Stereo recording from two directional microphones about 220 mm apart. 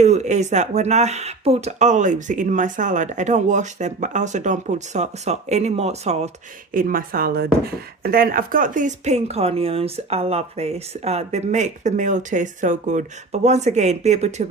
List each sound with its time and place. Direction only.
0.0 s speech: 30° right (ahead or behind)
6.7 s speech: 40° right (ahead or behind)